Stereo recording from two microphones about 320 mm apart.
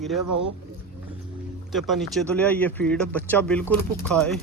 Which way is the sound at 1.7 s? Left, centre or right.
Centre.